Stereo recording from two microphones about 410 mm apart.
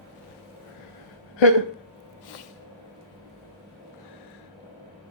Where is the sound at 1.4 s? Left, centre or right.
Left.